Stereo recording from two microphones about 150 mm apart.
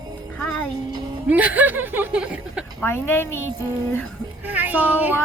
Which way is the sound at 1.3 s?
10° right (ahead or behind).